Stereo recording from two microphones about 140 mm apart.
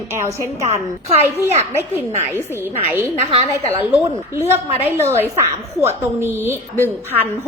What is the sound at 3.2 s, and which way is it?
Speech, 45° right (ahead or behind).